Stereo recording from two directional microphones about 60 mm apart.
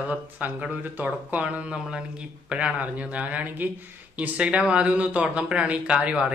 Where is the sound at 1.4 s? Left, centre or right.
Centre.